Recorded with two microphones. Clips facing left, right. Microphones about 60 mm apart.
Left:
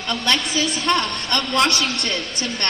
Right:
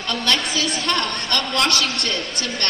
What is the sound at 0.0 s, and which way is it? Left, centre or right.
Speech, centre.